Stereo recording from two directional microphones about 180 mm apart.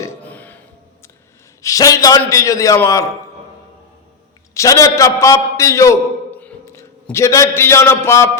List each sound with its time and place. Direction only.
0.0 s burping: 10° left (ahead or behind)
1.6 s a man's voice: 20° left (ahead or behind)
4.5 s a man's voice: 15° left (ahead or behind)